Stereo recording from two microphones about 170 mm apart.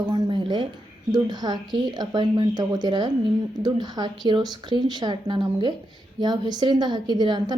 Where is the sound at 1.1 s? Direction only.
25° right (ahead or behind).